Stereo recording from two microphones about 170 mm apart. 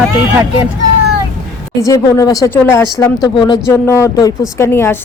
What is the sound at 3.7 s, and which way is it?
Speech, 15° left (ahead or behind).